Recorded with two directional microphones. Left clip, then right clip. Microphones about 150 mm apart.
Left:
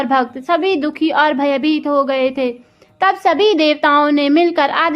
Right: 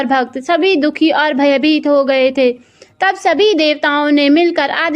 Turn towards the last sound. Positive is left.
turn(degrees=-25)  # may be behind; listen again after turning